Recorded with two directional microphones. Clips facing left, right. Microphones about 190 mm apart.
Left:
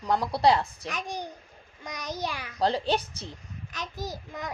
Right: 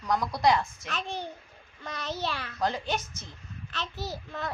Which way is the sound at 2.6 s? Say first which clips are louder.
Left 5 dB; 35° left (ahead or behind).